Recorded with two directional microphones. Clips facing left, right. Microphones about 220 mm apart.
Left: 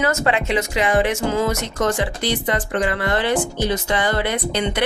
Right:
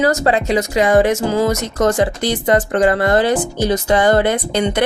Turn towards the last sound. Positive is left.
turn(degrees=-45)  # may be behind; listen again after turning